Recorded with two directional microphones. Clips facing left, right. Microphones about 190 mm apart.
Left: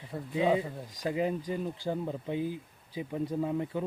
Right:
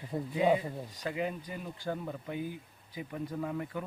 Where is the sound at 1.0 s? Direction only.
30° left (ahead or behind).